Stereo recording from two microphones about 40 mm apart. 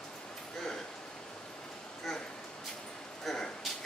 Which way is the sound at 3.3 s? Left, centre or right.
Centre.